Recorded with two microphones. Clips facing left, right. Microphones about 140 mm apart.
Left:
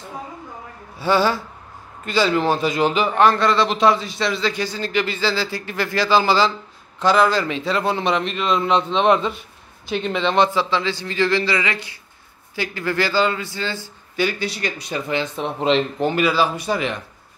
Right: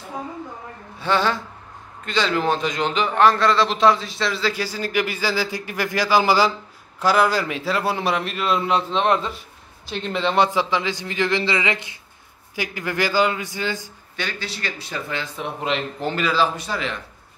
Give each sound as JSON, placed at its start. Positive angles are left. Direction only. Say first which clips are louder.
{"t": 0.9, "sound": "a woman's voice", "louder": "left 3 dB", "side_deg": 5}
{"t": 14.1, "sound": "speech", "louder": "left 8 dB", "side_deg": 10}
{"t": 16.1, "sound": "speech", "louder": "even", "side_deg": 10}